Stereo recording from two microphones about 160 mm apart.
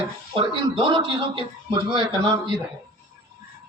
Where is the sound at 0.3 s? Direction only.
35° right (ahead or behind).